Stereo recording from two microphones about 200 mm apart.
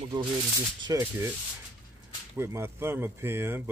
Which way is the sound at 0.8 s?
20° right (ahead or behind).